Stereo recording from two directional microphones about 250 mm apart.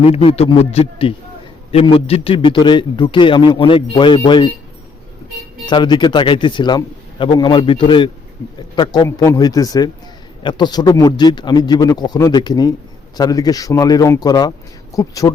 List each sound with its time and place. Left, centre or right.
0.0 s a man's voice: left
5.6 s a man's voice: centre